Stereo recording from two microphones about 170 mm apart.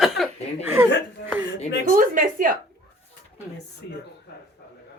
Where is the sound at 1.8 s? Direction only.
55° right (ahead or behind).